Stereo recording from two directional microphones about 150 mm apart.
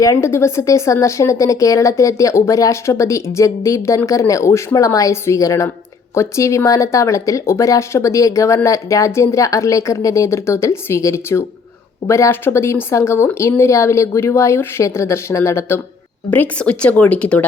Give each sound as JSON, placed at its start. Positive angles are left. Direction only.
{"t": 0.0, "sound": "a woman's voice", "side_deg": 20}